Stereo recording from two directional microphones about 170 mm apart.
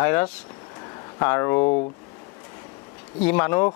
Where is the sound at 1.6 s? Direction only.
35° left (ahead or behind).